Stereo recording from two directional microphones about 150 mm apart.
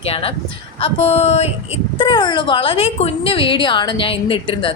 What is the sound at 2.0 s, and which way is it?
A woman's voice, 30° left (ahead or behind).